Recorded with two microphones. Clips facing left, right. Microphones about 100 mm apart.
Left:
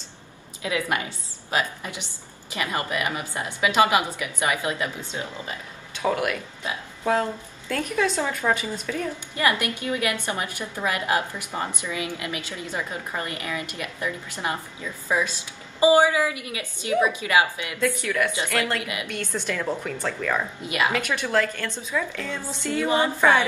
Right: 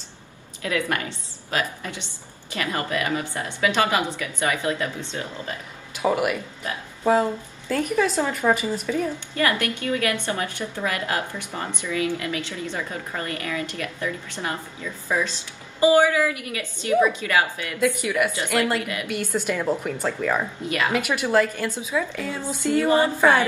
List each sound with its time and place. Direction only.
0.6 s a woman's voice: 20° left (ahead or behind)
5.9 s speech: 10° right (ahead or behind)
9.3 s a woman's voice: 20° left (ahead or behind)
17.7 s speech: 10° right (ahead or behind)
18.8 s a woman's voice: 15° left (ahead or behind)
19.0 s speech: 10° right (ahead or behind)
20.6 s a woman's voice: 15° left (ahead or behind)
20.9 s speech: 10° right (ahead or behind)
22.8 s a woman's voice: 15° left (ahead or behind)